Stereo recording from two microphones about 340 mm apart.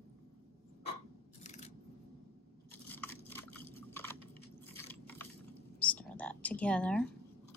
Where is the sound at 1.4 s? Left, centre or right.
Centre.